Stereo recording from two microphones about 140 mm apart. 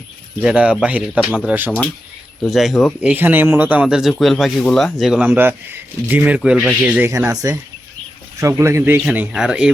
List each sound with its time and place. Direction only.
0.4 s speech: 5° right (ahead or behind)
2.4 s speech: centre (ahead or behind)
3.1 s speech: 15° right (ahead or behind)
7.3 s speech: 25° right (ahead or behind); by 9.7 s 5° right (ahead or behind)